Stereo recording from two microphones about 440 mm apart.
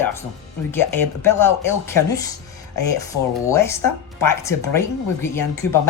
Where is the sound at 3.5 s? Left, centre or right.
Centre.